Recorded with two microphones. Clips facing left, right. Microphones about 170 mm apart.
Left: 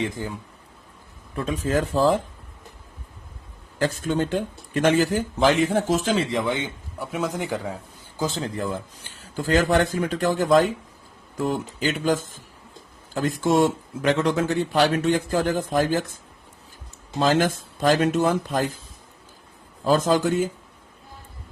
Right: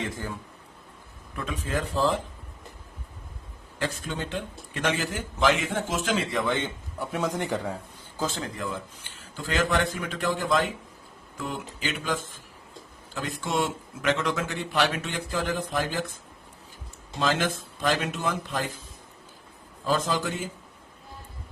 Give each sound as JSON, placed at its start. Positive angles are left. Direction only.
{"t": 1.4, "sound": "speech", "side_deg": 35}
{"t": 3.8, "sound": "speech", "side_deg": 40}
{"t": 6.3, "sound": "speech", "side_deg": 15}
{"t": 7.0, "sound": "a man's voice", "side_deg": 0}
{"t": 8.4, "sound": "speech", "side_deg": 30}
{"t": 13.1, "sound": "speech", "side_deg": 40}
{"t": 17.2, "sound": "speech", "side_deg": 40}
{"t": 19.8, "sound": "a man's voice", "side_deg": 45}